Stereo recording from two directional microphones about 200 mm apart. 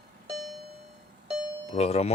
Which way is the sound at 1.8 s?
30° left (ahead or behind).